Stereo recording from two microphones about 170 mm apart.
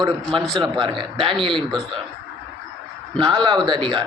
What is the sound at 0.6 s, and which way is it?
Speech, 30° right (ahead or behind).